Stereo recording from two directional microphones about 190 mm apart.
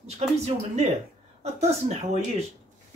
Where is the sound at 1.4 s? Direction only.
35° right (ahead or behind).